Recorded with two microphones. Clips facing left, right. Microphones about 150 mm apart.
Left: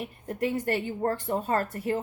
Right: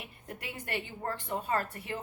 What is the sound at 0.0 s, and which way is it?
A woman's voice, 40° left (ahead or behind).